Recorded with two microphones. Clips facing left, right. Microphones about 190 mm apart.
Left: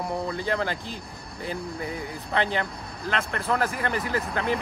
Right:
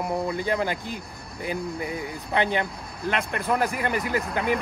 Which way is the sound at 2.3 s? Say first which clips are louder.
Right 2 dB; 15° right (ahead or behind).